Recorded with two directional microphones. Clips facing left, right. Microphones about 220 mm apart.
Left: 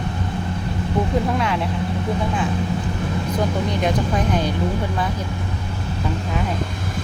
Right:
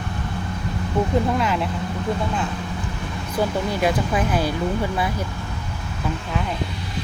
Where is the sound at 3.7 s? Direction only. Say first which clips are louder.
Even; 5° right (ahead or behind).